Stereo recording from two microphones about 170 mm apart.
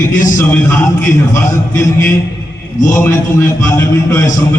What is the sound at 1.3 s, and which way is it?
A man's voice, 15° left (ahead or behind).